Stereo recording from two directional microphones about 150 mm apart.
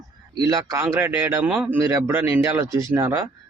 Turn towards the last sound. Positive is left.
turn(degrees=-15)  # may be behind; listen again after turning